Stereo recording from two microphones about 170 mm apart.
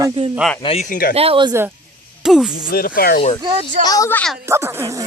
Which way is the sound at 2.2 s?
Centre (ahead or behind).